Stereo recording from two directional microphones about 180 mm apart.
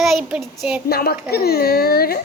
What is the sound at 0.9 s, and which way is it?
A woman's voice, 60° left (ahead or behind).